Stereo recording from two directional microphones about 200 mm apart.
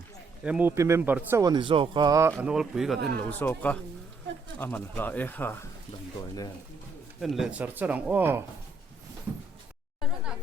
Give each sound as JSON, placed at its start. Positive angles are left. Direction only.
{"t": 0.4, "sound": "speech", "side_deg": -10}
{"t": 2.4, "sound": "speech", "side_deg": -5}
{"t": 7.2, "sound": "speech", "side_deg": 0}